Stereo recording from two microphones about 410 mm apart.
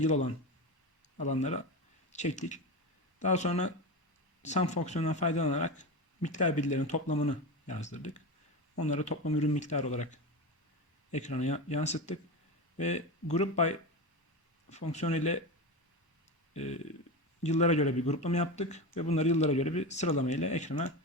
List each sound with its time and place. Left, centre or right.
0.0 s speech: centre
17.4 s speech: centre